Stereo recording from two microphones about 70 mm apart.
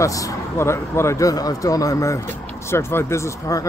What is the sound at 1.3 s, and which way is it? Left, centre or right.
Speech, left.